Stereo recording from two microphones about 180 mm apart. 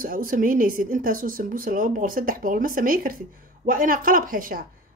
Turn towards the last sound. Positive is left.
turn(degrees=-50)  # may be behind; listen again after turning